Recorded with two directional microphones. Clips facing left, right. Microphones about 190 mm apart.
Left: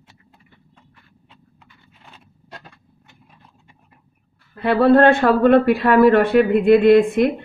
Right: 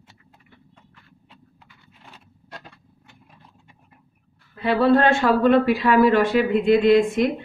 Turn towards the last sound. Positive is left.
turn(degrees=55)  # may be behind; listen again after turning